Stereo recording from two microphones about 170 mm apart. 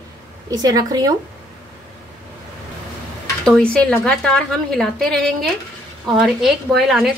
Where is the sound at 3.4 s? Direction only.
5° left (ahead or behind).